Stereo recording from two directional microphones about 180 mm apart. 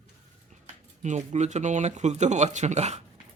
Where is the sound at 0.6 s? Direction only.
40° right (ahead or behind).